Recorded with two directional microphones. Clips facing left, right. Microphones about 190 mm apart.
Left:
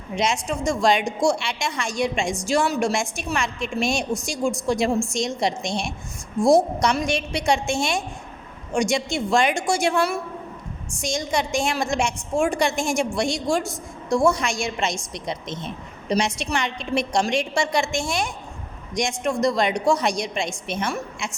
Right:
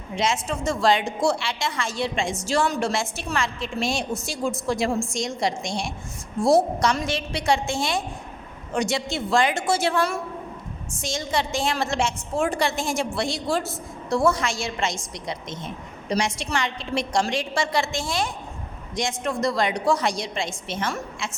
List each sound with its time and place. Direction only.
0.4 s a woman's voice: 15° left (ahead or behind)
6.8 s a woman's voice: 15° left (ahead or behind)
13.7 s a woman's voice: 5° right (ahead or behind)
14.3 s a woman's voice: 15° left (ahead or behind)